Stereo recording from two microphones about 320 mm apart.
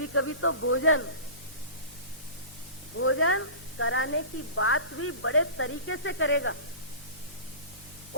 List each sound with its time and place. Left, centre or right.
0.0 s speech: left
3.0 s speech: left